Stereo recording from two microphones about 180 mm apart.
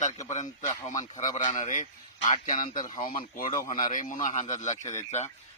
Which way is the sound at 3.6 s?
20° left (ahead or behind).